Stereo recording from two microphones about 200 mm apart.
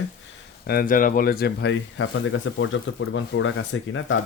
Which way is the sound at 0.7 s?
45° left (ahead or behind).